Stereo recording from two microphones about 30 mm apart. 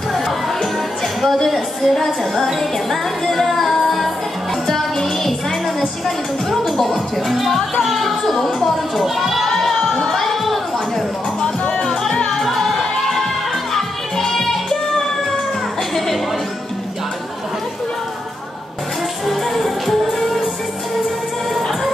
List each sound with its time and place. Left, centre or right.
1.5 s music: centre
6.8 s speech: centre
7.8 s a sound: centre
9.5 s crowd: centre
10.1 s a sound: centre
11.7 s music: centre
19.2 s music: centre